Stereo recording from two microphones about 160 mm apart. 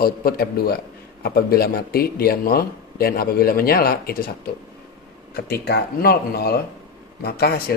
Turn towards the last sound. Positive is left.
turn(degrees=80)